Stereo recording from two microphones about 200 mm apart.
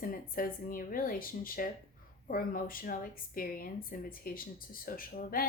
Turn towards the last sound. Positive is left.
turn(degrees=45)  # may be behind; listen again after turning